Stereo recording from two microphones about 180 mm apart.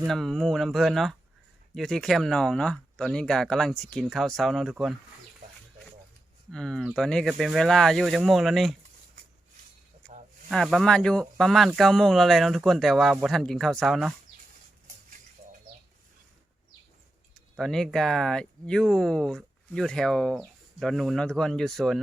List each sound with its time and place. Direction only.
0.1 s speech: centre (ahead or behind)
6.5 s speech: 5° left (ahead or behind)
10.1 s snake: 40° right (ahead or behind)
10.5 s speech: centre (ahead or behind)
15.4 s a sound: 40° right (ahead or behind)
17.6 s speech: centre (ahead or behind)